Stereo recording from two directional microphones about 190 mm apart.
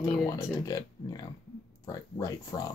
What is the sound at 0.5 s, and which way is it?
Speech, 20° left (ahead or behind).